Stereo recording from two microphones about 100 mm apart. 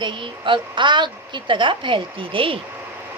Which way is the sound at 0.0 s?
55° right (ahead or behind).